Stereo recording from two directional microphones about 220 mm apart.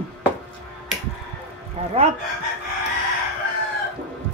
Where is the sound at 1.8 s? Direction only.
30° right (ahead or behind).